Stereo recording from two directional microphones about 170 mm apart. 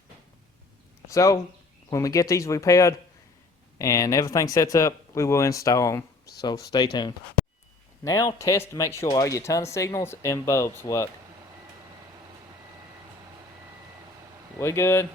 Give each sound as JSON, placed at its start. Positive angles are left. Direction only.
{"t": 1.0, "sound": "speech", "side_deg": 20}
{"t": 14.6, "sound": "speech", "side_deg": 15}